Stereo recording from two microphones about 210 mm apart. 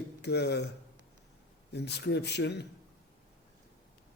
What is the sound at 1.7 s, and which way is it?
Speech, 50° left (ahead or behind).